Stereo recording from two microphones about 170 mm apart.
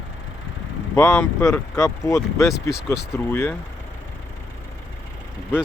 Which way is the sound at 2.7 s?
5° right (ahead or behind).